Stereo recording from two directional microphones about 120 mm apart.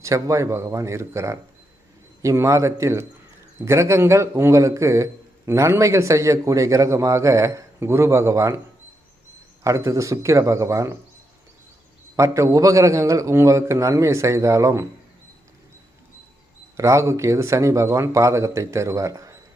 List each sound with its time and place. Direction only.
0.0 s a man's voice: 25° right (ahead or behind)
9.6 s a man's voice: 25° right (ahead or behind)
12.1 s a man's voice: 25° right (ahead or behind)
16.7 s a man's voice: 25° right (ahead or behind)